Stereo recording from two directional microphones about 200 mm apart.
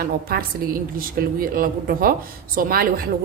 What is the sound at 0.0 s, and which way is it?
A woman's voice, 45° right (ahead or behind).